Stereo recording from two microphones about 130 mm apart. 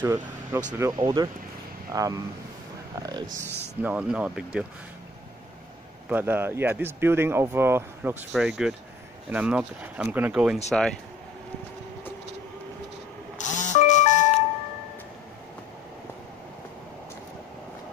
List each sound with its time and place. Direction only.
0.0 s speech: 20° right (ahead or behind)
3.0 s a sound: 30° right (ahead or behind)
3.8 s speech: 10° right (ahead or behind)
6.0 s speech: 15° right (ahead or behind)
10.7 s speech: 5° left (ahead or behind)
13.4 s music: 70° left (ahead or behind)